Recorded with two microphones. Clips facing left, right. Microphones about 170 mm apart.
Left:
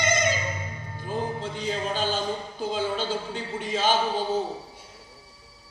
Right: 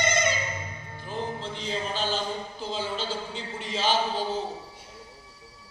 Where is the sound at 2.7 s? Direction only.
50° left (ahead or behind).